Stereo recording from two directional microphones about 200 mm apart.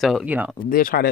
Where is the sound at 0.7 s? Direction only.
45° left (ahead or behind).